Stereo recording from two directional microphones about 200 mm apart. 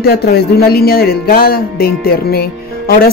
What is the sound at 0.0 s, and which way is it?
Speech, 50° left (ahead or behind).